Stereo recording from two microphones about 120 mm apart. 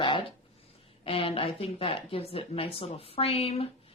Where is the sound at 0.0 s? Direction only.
45° left (ahead or behind).